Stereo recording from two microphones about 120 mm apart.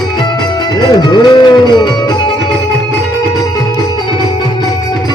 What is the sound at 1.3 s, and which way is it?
Music, 35° left (ahead or behind).